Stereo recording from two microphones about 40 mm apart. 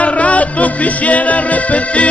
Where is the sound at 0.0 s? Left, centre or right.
Left.